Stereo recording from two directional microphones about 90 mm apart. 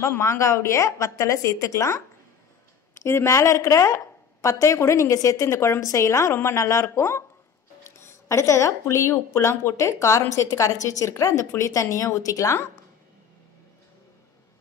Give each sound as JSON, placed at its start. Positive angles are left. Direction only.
{"t": 0.0, "sound": "speech", "side_deg": 30}